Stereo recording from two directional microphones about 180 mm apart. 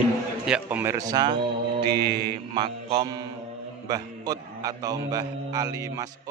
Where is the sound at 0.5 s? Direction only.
10° right (ahead or behind).